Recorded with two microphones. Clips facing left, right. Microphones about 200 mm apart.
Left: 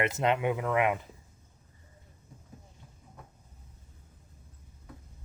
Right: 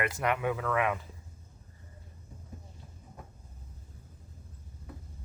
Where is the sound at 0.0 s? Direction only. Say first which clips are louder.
Left 3 dB; 25° left (ahead or behind).